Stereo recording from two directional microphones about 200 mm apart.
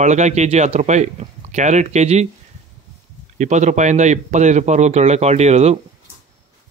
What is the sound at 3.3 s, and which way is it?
Speech, 35° right (ahead or behind).